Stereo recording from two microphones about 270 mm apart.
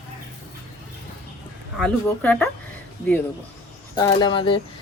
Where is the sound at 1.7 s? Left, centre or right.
Centre.